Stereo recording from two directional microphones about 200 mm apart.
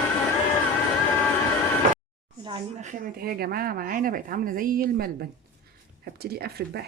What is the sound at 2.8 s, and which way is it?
Speech, 40° right (ahead or behind).